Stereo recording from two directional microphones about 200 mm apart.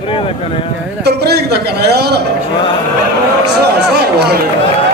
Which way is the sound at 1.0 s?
55° right (ahead or behind).